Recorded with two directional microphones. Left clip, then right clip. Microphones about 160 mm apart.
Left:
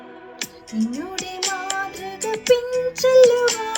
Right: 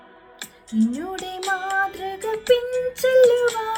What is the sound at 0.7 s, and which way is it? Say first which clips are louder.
Speech: right 4 dB; 15° left (ahead or behind).